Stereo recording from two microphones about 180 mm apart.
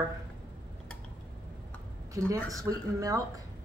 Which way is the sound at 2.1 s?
20° right (ahead or behind).